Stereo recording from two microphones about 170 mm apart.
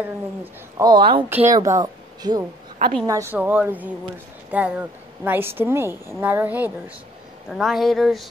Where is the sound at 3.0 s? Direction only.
20° right (ahead or behind).